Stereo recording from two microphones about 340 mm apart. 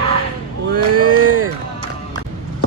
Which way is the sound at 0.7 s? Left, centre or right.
Right.